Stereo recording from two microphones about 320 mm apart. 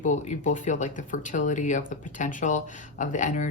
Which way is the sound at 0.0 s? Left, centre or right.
Left.